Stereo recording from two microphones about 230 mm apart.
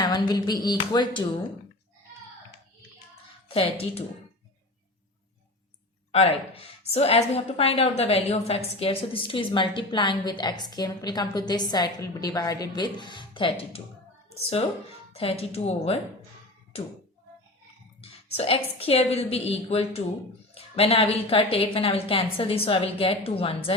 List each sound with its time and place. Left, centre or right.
0.0 s a woman's voice: centre
3.5 s a woman's voice: left
6.1 s a woman's voice: left
15.1 s a woman's voice: left
18.0 s a woman's voice: left